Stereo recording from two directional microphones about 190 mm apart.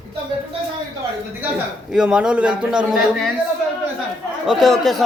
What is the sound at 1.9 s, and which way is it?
A man's voice, 5° right (ahead or behind).